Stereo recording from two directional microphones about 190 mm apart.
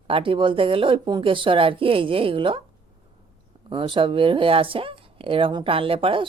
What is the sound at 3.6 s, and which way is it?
Speech, 25° right (ahead or behind).